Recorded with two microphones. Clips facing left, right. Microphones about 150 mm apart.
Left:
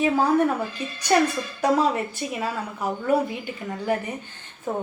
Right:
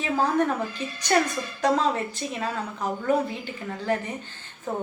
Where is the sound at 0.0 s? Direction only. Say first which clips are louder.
Left 4 dB; 10° left (ahead or behind).